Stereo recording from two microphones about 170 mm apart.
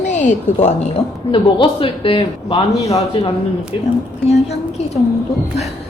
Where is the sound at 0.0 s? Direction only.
45° left (ahead or behind).